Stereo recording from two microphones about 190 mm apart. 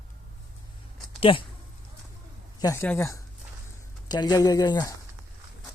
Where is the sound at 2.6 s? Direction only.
15° left (ahead or behind).